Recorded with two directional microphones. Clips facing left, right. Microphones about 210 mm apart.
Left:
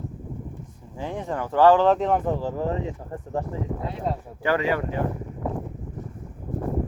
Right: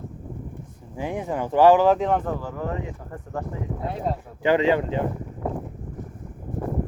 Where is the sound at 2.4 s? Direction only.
30° left (ahead or behind).